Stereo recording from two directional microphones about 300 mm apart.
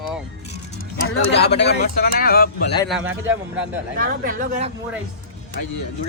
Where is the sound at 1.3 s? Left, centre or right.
Left.